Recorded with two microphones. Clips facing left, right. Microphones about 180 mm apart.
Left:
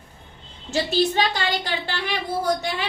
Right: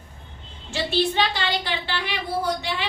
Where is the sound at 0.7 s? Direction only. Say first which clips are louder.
Left 2 dB; 40° left (ahead or behind).